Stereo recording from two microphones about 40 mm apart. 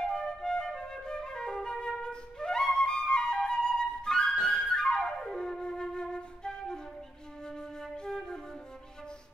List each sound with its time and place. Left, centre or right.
0.0 s flute: centre